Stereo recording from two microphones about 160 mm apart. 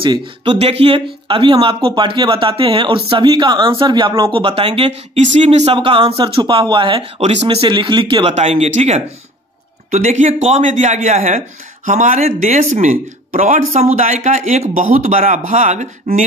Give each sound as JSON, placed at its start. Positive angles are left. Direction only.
{"t": 0.0, "sound": "speech", "side_deg": -30}